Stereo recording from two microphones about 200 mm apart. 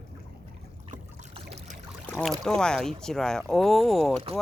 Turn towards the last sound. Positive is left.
turn(degrees=0)  # may be behind; listen again after turning